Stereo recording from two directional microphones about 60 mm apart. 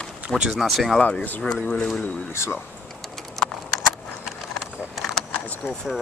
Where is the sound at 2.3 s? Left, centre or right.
Left.